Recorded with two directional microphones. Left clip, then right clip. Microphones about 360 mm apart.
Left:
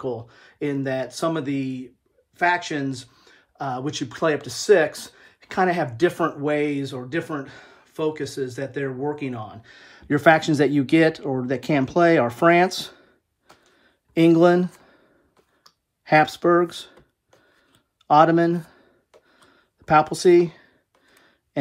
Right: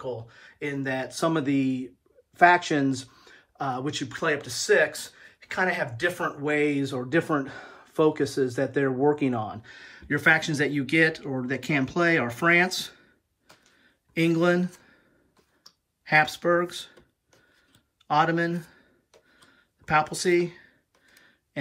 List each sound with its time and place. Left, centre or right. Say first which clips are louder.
0.0 s speech: left 5 dB; centre
15.6 s computer keyboard: left 1 dB; centre
18.0 s speech: left 8 dB; centre
19.3 s a sound: left 2 dB; centre